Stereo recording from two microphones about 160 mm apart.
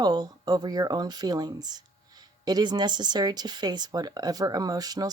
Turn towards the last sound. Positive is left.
turn(degrees=-25)  # may be behind; listen again after turning